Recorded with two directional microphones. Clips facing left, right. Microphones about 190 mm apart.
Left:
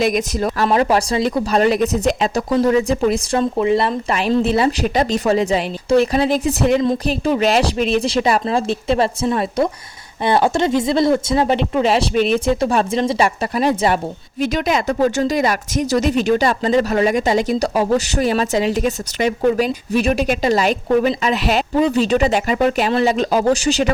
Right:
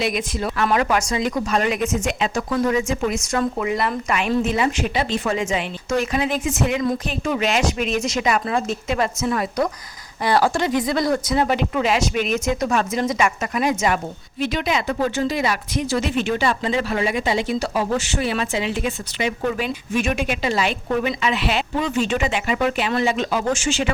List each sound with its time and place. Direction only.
0.0 s speech: 45° left (ahead or behind)
0.7 s speech: 30° left (ahead or behind)
14.4 s speech: 45° left (ahead or behind)